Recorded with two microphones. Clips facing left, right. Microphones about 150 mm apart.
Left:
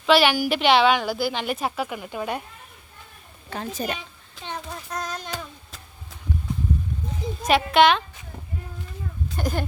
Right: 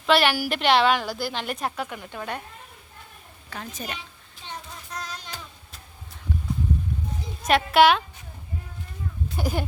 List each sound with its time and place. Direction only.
0.0 s a woman's voice: centre (ahead or behind)
3.5 s a woman's voice: 35° left (ahead or behind)
4.4 s a sound: 90° left
4.9 s a sound: 50° left (ahead or behind)
7.4 s a woman's voice: centre (ahead or behind)
9.3 s speech: 10° right (ahead or behind)